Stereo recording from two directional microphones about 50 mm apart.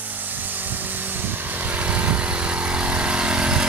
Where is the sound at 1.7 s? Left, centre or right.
Right.